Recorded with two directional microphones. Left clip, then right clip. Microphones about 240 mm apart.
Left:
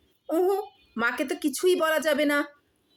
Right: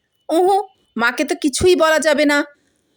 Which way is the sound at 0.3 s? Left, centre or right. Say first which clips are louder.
Right 10 dB; right.